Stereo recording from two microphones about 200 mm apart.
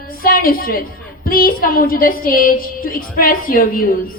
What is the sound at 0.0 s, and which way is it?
A woman's voice, 45° left (ahead or behind).